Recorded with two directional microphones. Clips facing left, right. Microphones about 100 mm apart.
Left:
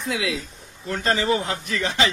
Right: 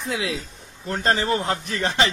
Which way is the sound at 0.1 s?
30° right (ahead or behind).